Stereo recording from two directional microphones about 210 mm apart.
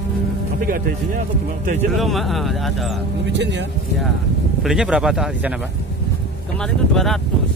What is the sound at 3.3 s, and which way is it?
Speech, 55° right (ahead or behind).